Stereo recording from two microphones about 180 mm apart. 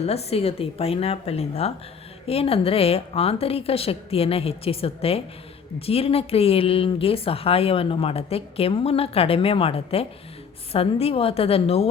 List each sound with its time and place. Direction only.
0.0 s a woman's voice: 35° left (ahead or behind)